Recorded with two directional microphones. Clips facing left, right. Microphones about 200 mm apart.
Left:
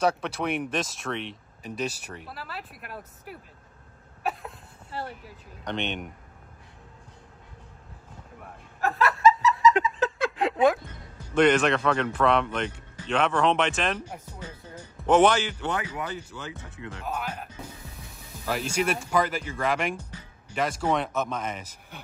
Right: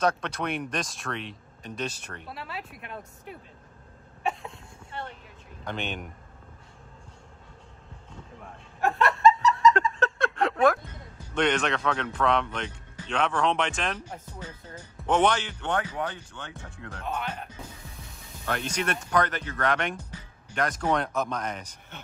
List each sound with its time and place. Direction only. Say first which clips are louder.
0.0 s a man's voice: left 1 dB; 5° left (ahead or behind)
4.2 s cough: even; centre (ahead or behind)
4.9 s speech: left 3 dB; 35° left (ahead or behind)
5.7 s a man's voice: left 3 dB; centre (ahead or behind)
8.4 s chuckle: right 1 dB; centre (ahead or behind)
11.3 s a man's voice: left 5 dB; 5° left (ahead or behind)